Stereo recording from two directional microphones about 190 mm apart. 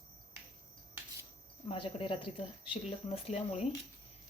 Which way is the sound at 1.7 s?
30° left (ahead or behind).